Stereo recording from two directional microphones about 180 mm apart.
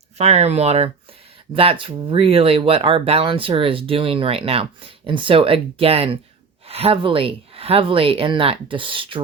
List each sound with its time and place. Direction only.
0.2 s speech: 35° right (ahead or behind)